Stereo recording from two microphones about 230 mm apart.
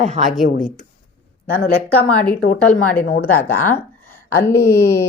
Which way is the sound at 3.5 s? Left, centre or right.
Left.